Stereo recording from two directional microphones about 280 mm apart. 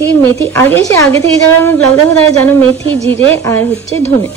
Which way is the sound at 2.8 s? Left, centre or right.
Centre.